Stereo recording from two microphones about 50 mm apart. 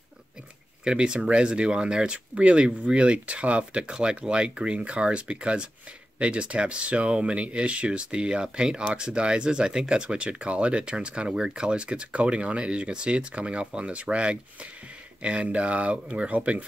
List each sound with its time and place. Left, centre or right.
0.8 s speech: centre